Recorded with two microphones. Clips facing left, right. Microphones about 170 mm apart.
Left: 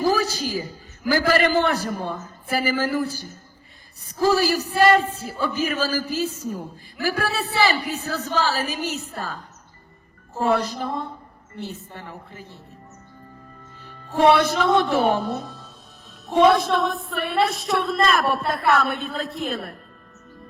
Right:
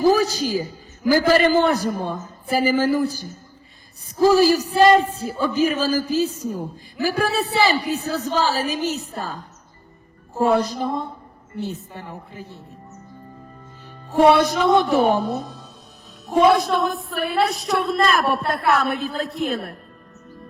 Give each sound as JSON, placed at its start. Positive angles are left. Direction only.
{"t": 0.0, "sound": "a man's voice", "side_deg": -15}
{"t": 4.2, "sound": "a man's voice", "side_deg": -15}
{"t": 14.1, "sound": "a man's voice", "side_deg": -10}
{"t": 15.3, "sound": "speech", "side_deg": 0}
{"t": 16.2, "sound": "music", "side_deg": -5}